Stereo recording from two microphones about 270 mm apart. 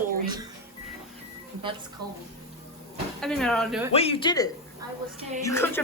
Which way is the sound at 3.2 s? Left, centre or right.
Centre.